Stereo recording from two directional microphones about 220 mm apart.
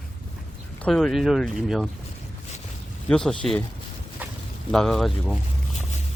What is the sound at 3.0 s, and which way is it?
Speech, 5° left (ahead or behind).